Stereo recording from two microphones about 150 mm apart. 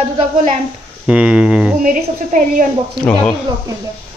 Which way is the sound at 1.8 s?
60° right (ahead or behind).